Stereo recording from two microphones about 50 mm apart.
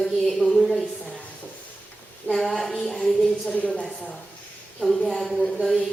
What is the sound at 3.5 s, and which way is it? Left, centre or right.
Speech, left.